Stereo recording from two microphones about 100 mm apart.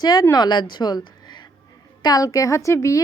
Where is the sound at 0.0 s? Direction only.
40° left (ahead or behind).